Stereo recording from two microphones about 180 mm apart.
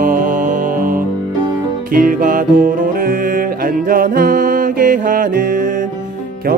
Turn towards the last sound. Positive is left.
turn(degrees=-50)  # may be behind; listen again after turning